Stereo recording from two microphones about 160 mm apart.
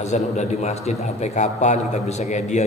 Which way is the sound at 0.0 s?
45° left (ahead or behind).